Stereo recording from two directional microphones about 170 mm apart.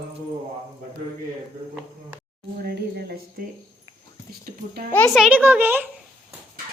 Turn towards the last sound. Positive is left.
turn(degrees=-10)  # may be behind; listen again after turning